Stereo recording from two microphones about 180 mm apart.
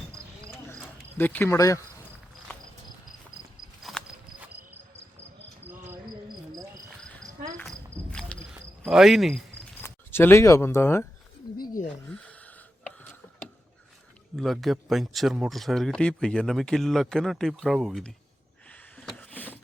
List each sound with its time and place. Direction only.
1.2 s speech: 10° left (ahead or behind)
3.8 s horse: 5° right (ahead or behind)
6.9 s cricket: 5° left (ahead or behind)
8.3 s cricket: 5° left (ahead or behind)
8.8 s speech: centre (ahead or behind)
9.8 s speech: 10° left (ahead or behind)
11.6 s wild animals: 50° left (ahead or behind)
12.0 s a sound: 10° left (ahead or behind)
14.3 s speech: centre (ahead or behind)
18.7 s a sound: 5° left (ahead or behind)